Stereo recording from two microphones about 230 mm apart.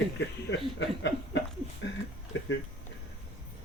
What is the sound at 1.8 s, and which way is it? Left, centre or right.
Speech, left.